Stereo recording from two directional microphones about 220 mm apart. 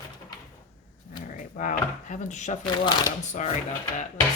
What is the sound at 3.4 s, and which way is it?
Speech, 35° left (ahead or behind).